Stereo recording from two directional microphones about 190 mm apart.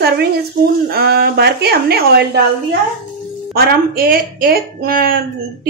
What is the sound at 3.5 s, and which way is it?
A woman's voice, 55° right (ahead or behind).